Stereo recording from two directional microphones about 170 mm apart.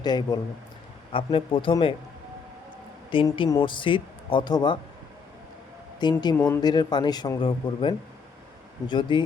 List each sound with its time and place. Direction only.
0.0 s speech: 25° left (ahead or behind)
3.2 s speech: 25° left (ahead or behind)
6.0 s speech: 25° left (ahead or behind)
6.3 s speech: 10° left (ahead or behind)
6.6 s speech: 25° left (ahead or behind)